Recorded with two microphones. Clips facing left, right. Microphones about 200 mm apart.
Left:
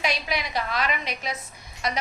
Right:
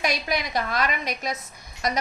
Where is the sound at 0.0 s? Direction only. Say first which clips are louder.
Right 2 dB; 45° right (ahead or behind).